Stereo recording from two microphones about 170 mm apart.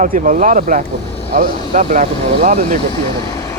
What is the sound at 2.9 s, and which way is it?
Speech, 25° left (ahead or behind).